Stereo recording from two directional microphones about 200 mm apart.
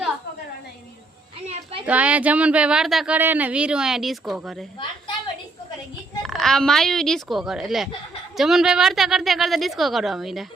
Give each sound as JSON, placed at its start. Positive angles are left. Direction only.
{"t": 1.8, "sound": "speech", "side_deg": -5}
{"t": 4.8, "sound": "a sound", "side_deg": 25}
{"t": 6.2, "sound": "speech", "side_deg": 0}